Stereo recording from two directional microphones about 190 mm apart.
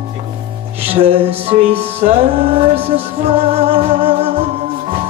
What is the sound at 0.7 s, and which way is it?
Music, 30° right (ahead or behind).